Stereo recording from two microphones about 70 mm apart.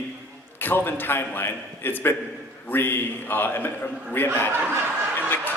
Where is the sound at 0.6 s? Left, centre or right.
Left.